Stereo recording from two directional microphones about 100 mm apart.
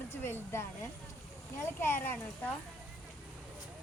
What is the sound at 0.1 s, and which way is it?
Speech, 25° left (ahead or behind).